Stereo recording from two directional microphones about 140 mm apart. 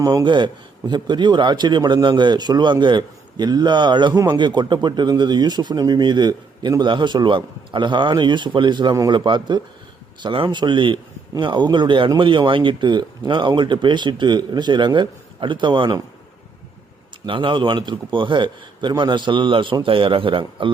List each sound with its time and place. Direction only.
0.0 s speech: 25° right (ahead or behind)
17.2 s speech: 35° right (ahead or behind)